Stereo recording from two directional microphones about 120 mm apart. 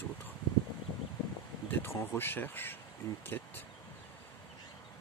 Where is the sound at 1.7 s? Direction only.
20° left (ahead or behind).